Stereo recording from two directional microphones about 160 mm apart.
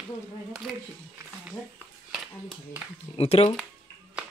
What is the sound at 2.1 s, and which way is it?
Speech, 5° right (ahead or behind).